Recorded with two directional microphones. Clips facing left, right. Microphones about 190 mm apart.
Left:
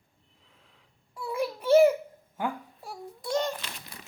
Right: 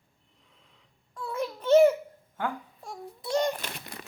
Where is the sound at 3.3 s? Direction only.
10° right (ahead or behind).